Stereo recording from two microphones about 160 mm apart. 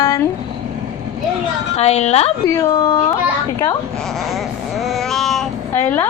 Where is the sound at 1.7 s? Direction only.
40° left (ahead or behind).